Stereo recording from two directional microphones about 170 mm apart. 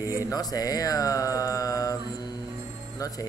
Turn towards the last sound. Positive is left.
turn(degrees=20)  # may be behind; listen again after turning